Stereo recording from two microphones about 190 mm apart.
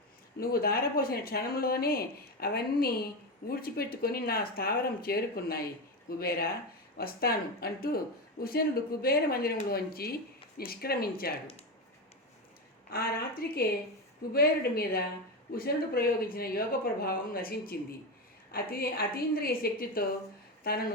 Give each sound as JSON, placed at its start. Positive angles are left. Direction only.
{"t": 0.3, "sound": "speech", "side_deg": 50}
{"t": 12.9, "sound": "speech", "side_deg": 50}